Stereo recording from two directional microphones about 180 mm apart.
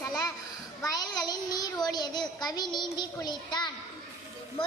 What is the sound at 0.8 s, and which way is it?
A child's voice, 20° left (ahead or behind).